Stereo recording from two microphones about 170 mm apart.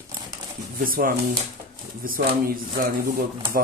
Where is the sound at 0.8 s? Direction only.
55° right (ahead or behind).